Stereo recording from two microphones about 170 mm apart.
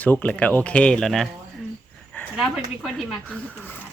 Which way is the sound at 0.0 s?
10° left (ahead or behind).